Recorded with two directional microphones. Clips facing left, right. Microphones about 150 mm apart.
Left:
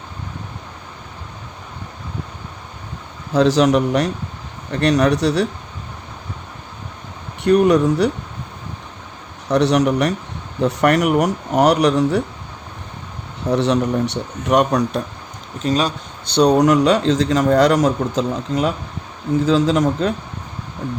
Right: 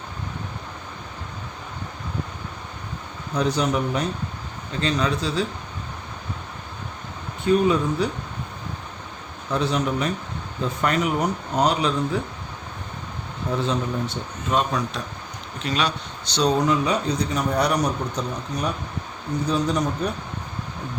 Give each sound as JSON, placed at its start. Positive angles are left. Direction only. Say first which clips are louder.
{"t": 3.3, "sound": "a man's voice", "louder": "left 9 dB", "side_deg": 90}
{"t": 4.7, "sound": "speech", "louder": "left 8 dB", "side_deg": 70}
{"t": 7.4, "sound": "speech", "louder": "left 6 dB", "side_deg": 75}
{"t": 9.5, "sound": "speech", "louder": "left 8 dB", "side_deg": 75}
{"t": 13.5, "sound": "speech", "louder": "left 8 dB", "side_deg": 75}
{"t": 15.6, "sound": "speech", "louder": "left 6 dB", "side_deg": 40}
{"t": 16.2, "sound": "a man's voice", "louder": "left 7 dB", "side_deg": 60}